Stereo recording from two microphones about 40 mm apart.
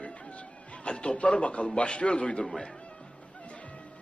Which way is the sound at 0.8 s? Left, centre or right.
Left.